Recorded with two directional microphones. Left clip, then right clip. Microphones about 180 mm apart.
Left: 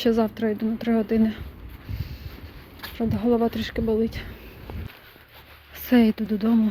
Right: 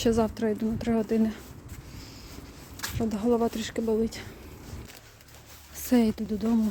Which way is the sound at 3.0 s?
10° right (ahead or behind).